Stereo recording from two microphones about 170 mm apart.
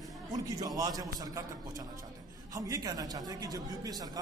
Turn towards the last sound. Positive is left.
turn(degrees=-20)  # may be behind; listen again after turning